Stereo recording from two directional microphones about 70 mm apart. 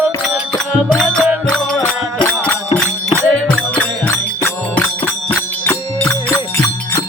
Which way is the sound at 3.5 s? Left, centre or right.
Left.